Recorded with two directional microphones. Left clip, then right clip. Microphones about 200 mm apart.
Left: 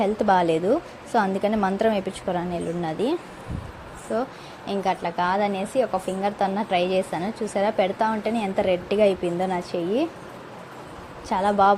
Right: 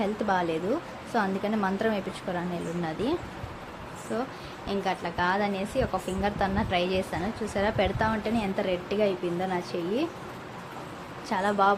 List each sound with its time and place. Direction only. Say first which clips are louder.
0.0 s a woman's voice: left 7 dB; 25° left (ahead or behind)
11.3 s a woman's voice: left 5 dB; 15° left (ahead or behind)